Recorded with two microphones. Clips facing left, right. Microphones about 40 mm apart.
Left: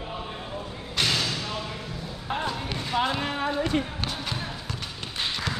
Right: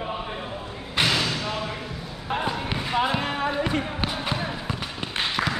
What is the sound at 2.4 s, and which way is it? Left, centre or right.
Basketball bounce, centre.